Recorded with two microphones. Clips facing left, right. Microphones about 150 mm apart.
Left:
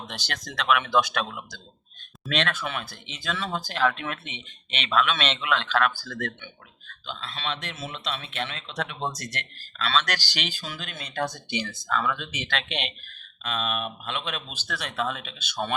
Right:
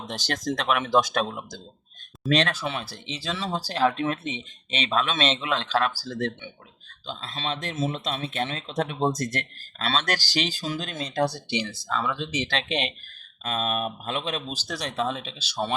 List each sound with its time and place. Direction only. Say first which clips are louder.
0.1 s speech: right 8 dB; 45° right (ahead or behind)